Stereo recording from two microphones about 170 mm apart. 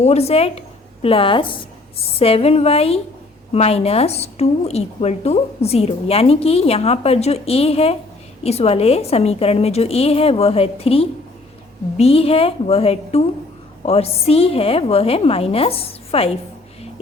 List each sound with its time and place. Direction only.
0.0 s a woman's voice: 40° left (ahead or behind)